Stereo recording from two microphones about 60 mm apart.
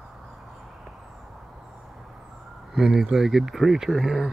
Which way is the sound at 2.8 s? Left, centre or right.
Centre.